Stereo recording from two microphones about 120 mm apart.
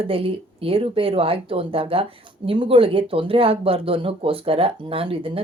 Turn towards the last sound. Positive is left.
turn(degrees=-50)  # may be behind; listen again after turning